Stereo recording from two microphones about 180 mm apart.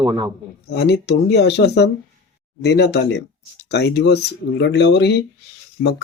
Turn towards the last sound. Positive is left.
turn(degrees=65)  # may be behind; listen again after turning